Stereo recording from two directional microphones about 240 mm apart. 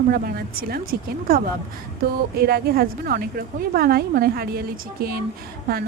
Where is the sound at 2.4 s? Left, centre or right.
Right.